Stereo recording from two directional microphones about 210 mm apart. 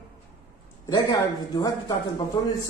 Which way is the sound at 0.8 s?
15° left (ahead or behind).